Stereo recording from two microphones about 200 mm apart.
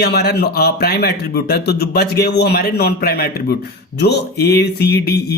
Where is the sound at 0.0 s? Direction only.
55° left (ahead or behind).